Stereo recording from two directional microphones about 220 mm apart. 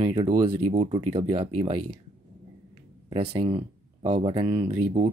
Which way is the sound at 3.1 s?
25° right (ahead or behind).